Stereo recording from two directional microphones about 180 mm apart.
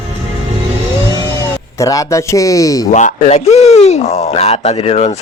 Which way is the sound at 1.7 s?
20° left (ahead or behind).